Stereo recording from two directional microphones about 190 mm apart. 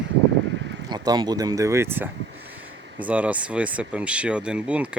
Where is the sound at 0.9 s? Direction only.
20° right (ahead or behind).